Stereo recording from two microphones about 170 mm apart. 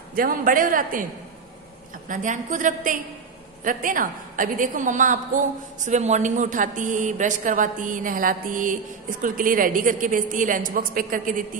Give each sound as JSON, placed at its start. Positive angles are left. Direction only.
{"t": 0.1, "sound": "a woman's voice", "side_deg": -55}
{"t": 2.0, "sound": "a woman's voice", "side_deg": -50}